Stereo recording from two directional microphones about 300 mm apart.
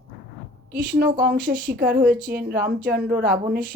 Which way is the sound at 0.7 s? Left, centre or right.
Right.